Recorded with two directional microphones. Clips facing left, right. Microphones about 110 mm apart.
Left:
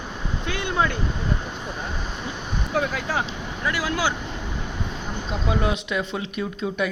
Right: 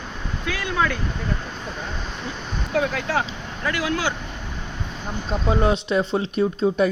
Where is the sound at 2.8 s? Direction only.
10° left (ahead or behind).